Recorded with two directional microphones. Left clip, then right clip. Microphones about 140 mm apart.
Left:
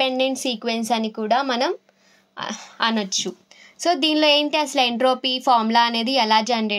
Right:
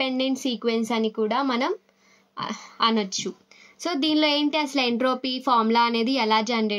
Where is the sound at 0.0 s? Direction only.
65° left (ahead or behind).